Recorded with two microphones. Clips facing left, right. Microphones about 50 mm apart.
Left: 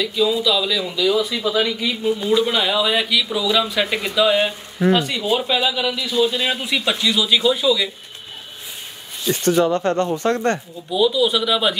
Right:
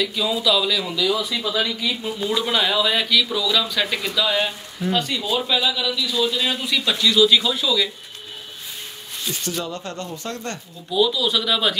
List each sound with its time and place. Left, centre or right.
0.0 s speech: centre
9.3 s speech: left
10.9 s speech: centre